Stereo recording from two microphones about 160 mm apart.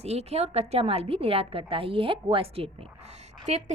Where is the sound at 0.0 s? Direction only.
40° right (ahead or behind).